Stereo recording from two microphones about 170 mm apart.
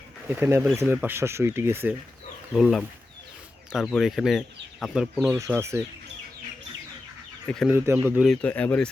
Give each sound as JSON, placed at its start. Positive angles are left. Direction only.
{"t": 0.3, "sound": "speech", "side_deg": -10}
{"t": 2.6, "sound": "speech", "side_deg": 0}
{"t": 5.5, "sound": "speech", "side_deg": -15}
{"t": 7.7, "sound": "speech", "side_deg": -15}
{"t": 8.2, "sound": "speech", "side_deg": 5}